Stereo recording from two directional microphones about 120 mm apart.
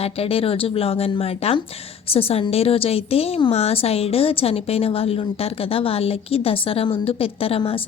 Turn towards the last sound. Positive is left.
turn(degrees=50)  # may be behind; listen again after turning